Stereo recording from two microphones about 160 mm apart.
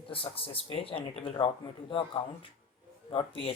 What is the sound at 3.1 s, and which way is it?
Speech, 35° left (ahead or behind).